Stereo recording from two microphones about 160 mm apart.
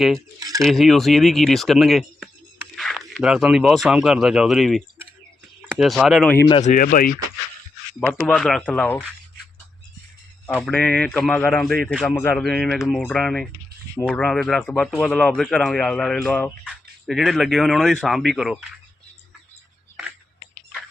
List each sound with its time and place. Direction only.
0.3 s speech: 20° right (ahead or behind)
0.6 s speech: centre (ahead or behind)
6.7 s speech: 60° left (ahead or behind)
8.0 s a man's voice: 5° left (ahead or behind)
10.4 s a man's voice: 10° left (ahead or behind)